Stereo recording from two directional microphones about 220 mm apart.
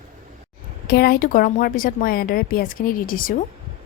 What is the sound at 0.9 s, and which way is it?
Speech, 45° left (ahead or behind).